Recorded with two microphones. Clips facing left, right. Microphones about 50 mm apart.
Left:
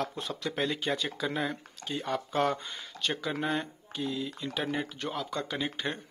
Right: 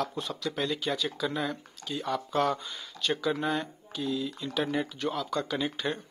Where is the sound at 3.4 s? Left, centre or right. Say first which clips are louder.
Right 1 dB; centre.